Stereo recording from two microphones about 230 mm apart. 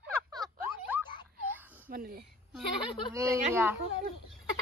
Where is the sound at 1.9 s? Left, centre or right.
Right.